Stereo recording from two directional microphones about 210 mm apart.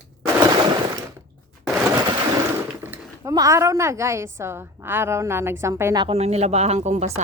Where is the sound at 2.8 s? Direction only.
10° right (ahead or behind).